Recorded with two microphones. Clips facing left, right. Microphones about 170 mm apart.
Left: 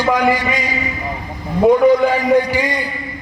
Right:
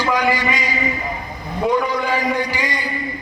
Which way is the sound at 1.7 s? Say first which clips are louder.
Left 8 dB; 55° left (ahead or behind).